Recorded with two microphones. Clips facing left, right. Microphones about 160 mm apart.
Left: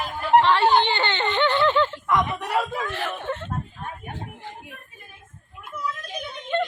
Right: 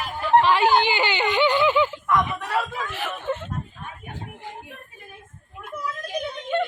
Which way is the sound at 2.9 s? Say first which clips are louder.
Even; centre (ahead or behind).